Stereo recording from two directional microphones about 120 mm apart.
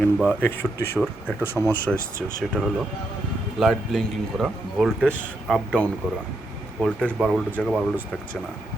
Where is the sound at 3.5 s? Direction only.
Centre (ahead or behind).